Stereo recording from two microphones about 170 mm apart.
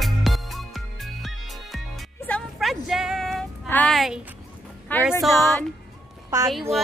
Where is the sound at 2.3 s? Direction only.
Centre (ahead or behind).